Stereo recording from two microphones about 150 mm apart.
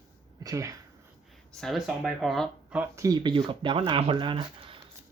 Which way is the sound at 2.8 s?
20° right (ahead or behind).